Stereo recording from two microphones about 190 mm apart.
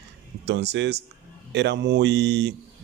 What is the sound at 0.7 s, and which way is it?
Speech, 65° right (ahead or behind).